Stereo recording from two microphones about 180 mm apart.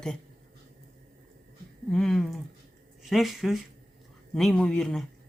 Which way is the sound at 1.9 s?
5° left (ahead or behind).